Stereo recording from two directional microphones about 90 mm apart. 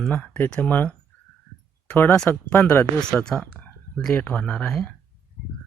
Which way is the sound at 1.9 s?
20° left (ahead or behind).